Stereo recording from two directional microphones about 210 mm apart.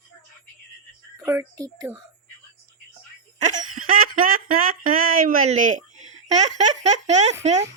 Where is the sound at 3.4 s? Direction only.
35° right (ahead or behind).